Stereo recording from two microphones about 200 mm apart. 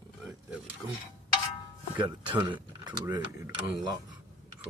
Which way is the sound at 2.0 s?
20° right (ahead or behind).